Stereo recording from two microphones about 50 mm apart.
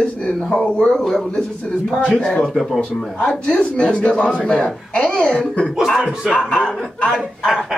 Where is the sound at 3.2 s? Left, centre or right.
Left.